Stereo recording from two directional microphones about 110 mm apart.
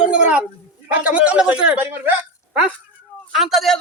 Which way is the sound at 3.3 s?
Centre (ahead or behind).